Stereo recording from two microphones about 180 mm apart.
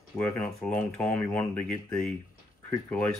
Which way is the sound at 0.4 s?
5° left (ahead or behind).